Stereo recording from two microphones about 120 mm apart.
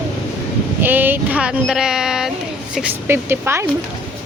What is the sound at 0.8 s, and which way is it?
Speech, 15° right (ahead or behind).